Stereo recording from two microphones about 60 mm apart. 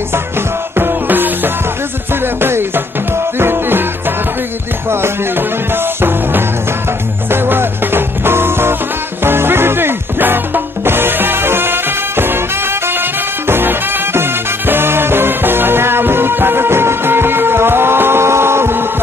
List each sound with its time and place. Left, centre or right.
0.7 s music: right
4.8 s music: right